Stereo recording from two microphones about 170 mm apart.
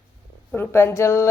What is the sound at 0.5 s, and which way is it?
Speech, 15° left (ahead or behind).